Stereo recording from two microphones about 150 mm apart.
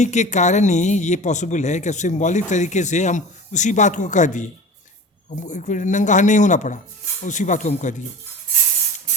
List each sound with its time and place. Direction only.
0.0 s a man's voice: 50° left (ahead or behind)